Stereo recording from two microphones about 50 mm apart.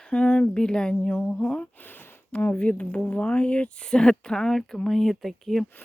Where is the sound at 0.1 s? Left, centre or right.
Left.